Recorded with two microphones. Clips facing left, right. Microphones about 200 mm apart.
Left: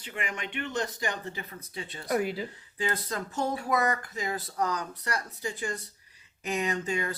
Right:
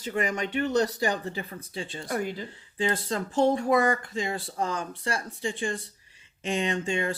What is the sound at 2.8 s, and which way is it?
Speech, 30° right (ahead or behind).